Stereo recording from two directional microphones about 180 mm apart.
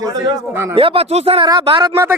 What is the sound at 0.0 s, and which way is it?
Speech, 20° right (ahead or behind).